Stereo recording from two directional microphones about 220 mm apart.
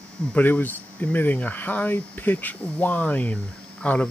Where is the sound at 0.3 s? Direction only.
10° left (ahead or behind).